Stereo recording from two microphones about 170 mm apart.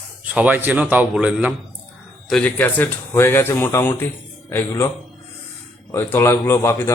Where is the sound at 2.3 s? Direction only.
10° left (ahead or behind).